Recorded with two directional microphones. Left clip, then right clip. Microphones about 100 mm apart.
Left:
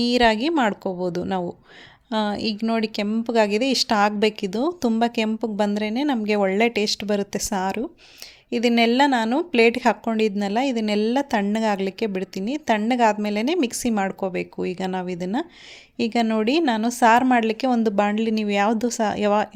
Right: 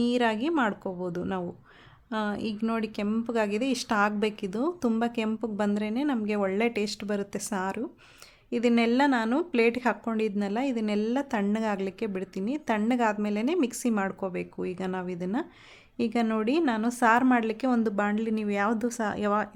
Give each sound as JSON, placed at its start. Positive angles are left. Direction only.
{"t": 0.0, "sound": "a woman's voice", "side_deg": 50}